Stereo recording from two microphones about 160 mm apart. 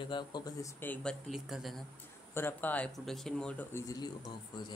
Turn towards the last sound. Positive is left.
turn(degrees=25)  # may be behind; listen again after turning